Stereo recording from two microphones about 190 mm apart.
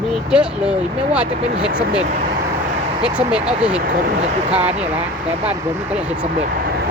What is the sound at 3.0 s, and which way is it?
Speech, 5° right (ahead or behind).